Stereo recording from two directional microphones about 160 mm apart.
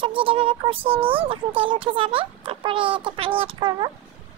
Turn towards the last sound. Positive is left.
turn(degrees=-35)  # may be behind; listen again after turning